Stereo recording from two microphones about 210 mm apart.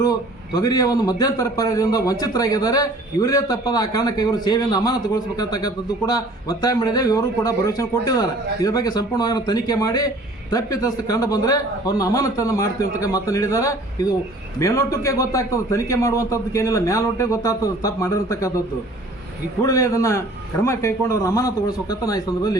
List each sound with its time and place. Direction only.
0.0 s a man's voice: 15° left (ahead or behind)
19.6 s a man's voice: 15° left (ahead or behind)